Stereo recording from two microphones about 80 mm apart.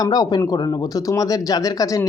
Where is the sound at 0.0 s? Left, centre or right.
Left.